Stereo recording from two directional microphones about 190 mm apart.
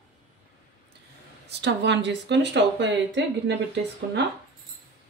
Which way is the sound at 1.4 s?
65° right (ahead or behind).